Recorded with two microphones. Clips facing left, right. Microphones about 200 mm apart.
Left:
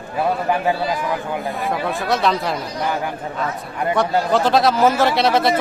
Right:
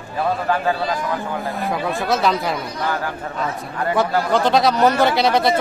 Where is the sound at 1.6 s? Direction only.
Centre (ahead or behind).